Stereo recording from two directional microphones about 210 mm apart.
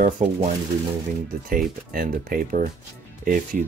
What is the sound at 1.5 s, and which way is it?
Speech, 45° right (ahead or behind).